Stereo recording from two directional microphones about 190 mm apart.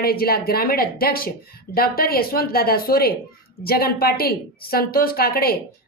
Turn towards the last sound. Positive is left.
turn(degrees=55)  # may be behind; listen again after turning